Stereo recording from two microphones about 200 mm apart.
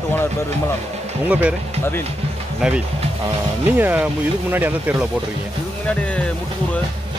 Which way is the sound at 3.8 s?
10° right (ahead or behind).